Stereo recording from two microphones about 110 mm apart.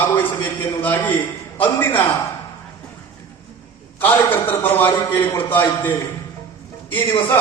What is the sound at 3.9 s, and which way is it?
A man's voice, 15° left (ahead or behind).